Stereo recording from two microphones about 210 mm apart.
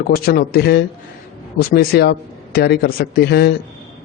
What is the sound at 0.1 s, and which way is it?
A man's voice, 45° left (ahead or behind).